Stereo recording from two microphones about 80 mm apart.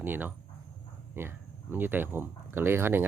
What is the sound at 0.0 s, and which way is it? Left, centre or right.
Speech, right.